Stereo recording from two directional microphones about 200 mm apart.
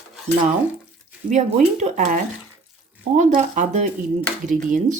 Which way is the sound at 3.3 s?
40° right (ahead or behind).